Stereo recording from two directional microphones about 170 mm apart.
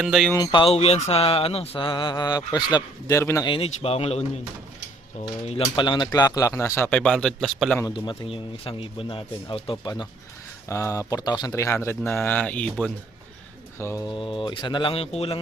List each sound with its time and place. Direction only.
0.0 s music: centre (ahead or behind)
0.3 s mantra: 30° left (ahead or behind)
3.5 s speech: 35° left (ahead or behind)
5.6 s mantra: 25° left (ahead or behind)
6.1 s speech: 20° left (ahead or behind); by 7.8 s centre (ahead or behind)
7.8 s mantra: 25° left (ahead or behind)
10.7 s speech: 15° left (ahead or behind)
14.1 s mantra: 30° left (ahead or behind)